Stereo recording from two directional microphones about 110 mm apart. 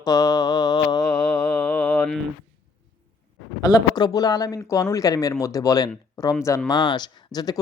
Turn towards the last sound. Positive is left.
turn(degrees=35)  # may be behind; listen again after turning